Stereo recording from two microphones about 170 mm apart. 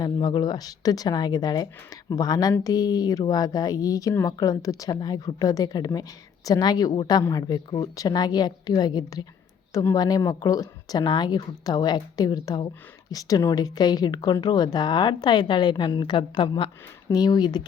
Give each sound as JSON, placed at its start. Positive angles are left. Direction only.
{"t": 0.0, "sound": "speech", "side_deg": 25}